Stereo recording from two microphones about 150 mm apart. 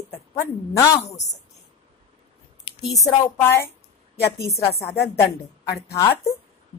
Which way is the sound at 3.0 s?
15° left (ahead or behind).